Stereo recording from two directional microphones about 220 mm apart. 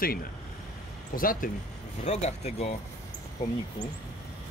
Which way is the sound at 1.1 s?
40° left (ahead or behind).